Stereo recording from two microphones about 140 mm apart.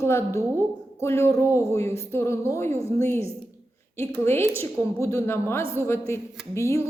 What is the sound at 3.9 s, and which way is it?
A woman's voice, 15° left (ahead or behind).